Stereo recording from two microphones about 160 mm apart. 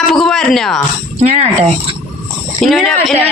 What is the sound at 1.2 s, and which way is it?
Speech, 45° right (ahead or behind).